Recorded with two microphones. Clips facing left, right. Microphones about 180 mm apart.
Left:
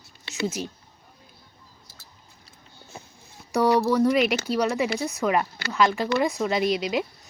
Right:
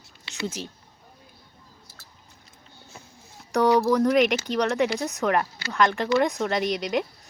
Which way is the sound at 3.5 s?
Centre (ahead or behind).